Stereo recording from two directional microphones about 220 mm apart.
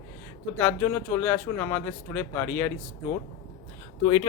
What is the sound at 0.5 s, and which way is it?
Speech, 10° left (ahead or behind).